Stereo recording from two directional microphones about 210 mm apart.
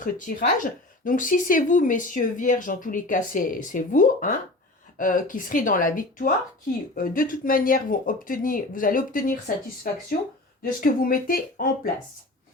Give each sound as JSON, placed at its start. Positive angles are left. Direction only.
{"t": 0.0, "sound": "speech", "side_deg": 40}